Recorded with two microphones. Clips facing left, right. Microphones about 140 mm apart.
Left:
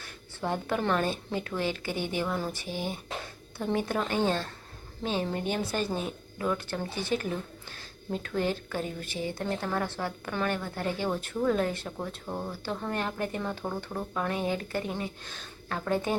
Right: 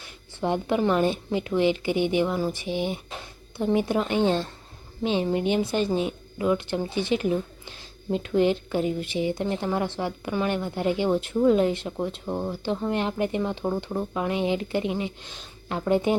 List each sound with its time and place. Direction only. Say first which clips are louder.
0.0 s speech: right 6 dB; 15° right (ahead or behind)